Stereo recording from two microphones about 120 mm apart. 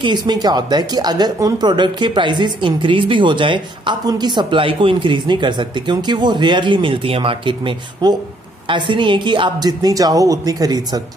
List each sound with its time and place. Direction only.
0.0 s speech: 40° right (ahead or behind)